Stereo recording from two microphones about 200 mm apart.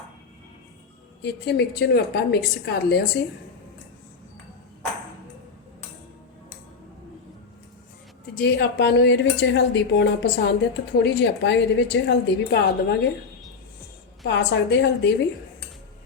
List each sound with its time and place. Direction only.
1.2 s speech: 60° left (ahead or behind)
8.4 s speech: 55° left (ahead or behind)
14.3 s speech: 60° left (ahead or behind)